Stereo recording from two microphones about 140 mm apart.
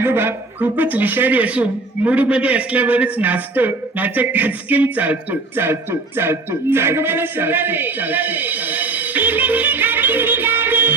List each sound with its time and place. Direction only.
0.0 s a man's voice: 15° right (ahead or behind)